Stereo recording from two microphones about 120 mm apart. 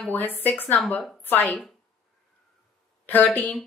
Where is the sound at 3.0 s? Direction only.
15° left (ahead or behind).